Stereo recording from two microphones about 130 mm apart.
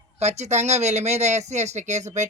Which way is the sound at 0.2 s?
60° right (ahead or behind).